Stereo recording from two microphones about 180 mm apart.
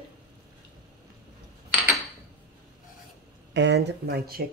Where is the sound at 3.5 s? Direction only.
80° right; by 4.4 s 60° right (ahead or behind).